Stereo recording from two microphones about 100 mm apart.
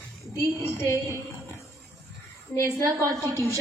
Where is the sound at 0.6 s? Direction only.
25° left (ahead or behind).